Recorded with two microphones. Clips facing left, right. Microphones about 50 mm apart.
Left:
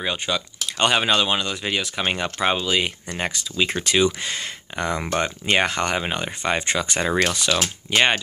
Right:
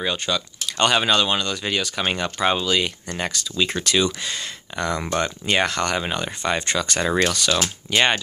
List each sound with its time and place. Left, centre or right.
0.0 s speech: centre; by 4.5 s left
4.7 s speech: left